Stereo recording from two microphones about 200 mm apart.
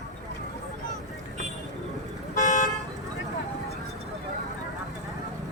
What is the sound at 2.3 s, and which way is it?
Toot, 40° left (ahead or behind).